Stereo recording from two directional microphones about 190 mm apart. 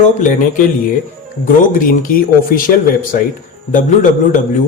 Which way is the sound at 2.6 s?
45° left (ahead or behind).